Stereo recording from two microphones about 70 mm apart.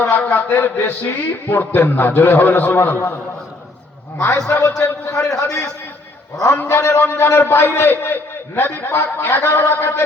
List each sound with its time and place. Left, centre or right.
0.0 s a man's voice: left
4.8 s a man's voice: left
6.5 s a man's voice: left